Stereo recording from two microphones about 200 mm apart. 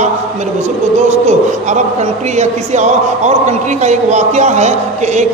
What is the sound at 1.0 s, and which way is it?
A man's voice, 35° right (ahead or behind).